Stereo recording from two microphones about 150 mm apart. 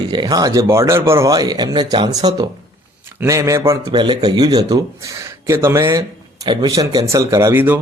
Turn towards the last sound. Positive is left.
turn(degrees=-15)  # may be behind; listen again after turning